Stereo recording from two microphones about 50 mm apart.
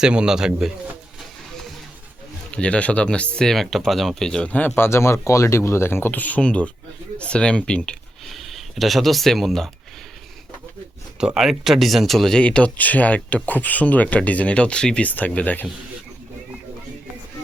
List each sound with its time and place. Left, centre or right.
0.0 s speech: centre
2.5 s speech: left
3.4 s speech: centre
4.4 s speech: left
4.7 s speech: left
6.4 s speech: left
8.2 s speech: centre
11.2 s speech: centre
12.4 s speech: left
12.7 s speech: left
15.0 s speech: left